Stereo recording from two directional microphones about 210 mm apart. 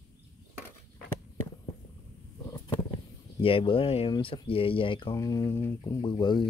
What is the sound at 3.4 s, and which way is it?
Speech, 25° left (ahead or behind).